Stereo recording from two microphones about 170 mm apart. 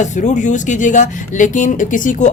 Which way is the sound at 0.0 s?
45° left (ahead or behind).